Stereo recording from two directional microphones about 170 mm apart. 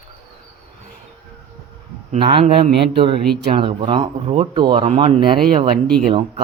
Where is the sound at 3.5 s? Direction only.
30° right (ahead or behind).